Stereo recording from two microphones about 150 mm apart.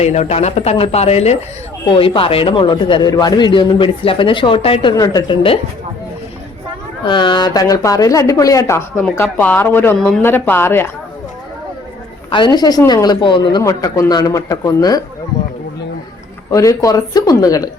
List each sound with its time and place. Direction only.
0.0 s speech: 50° left (ahead or behind)
7.0 s speech: 30° left (ahead or behind); by 10.9 s 15° left (ahead or behind)
12.3 s speech: 30° left (ahead or behind)
16.5 s speech: 20° left (ahead or behind)